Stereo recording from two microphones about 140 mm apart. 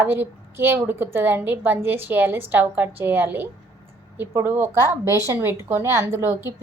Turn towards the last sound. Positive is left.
turn(degrees=-15)  # may be behind; listen again after turning